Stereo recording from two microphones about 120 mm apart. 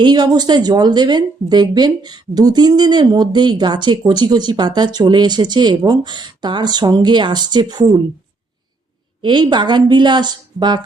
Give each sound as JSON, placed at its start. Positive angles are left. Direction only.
{"t": 0.0, "sound": "speech", "side_deg": -35}
{"t": 9.2, "sound": "speech", "side_deg": -40}